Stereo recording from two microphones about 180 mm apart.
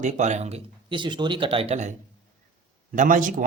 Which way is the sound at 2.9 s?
45° right (ahead or behind).